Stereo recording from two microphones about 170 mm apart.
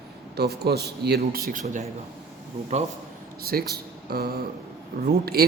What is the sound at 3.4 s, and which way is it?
A man's voice, 65° right (ahead or behind).